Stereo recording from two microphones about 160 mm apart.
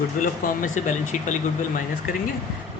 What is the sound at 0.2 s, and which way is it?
Speech, 55° left (ahead or behind).